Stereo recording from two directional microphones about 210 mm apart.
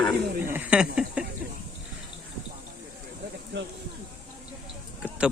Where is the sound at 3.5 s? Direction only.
55° right (ahead or behind).